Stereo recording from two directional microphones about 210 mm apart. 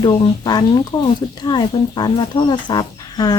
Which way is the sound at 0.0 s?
20° left (ahead or behind).